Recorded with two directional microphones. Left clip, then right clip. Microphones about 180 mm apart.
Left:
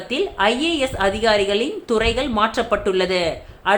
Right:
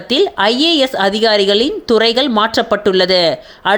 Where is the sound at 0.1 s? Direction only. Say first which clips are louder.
Right 6 dB; 50° right (ahead or behind).